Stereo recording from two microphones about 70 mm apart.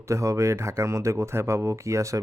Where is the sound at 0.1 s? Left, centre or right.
Right.